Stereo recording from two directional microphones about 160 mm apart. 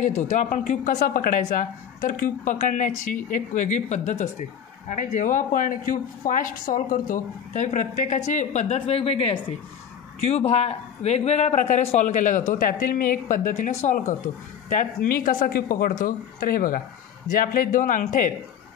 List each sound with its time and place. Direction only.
0.4 s a woman's voice: 55° left (ahead or behind)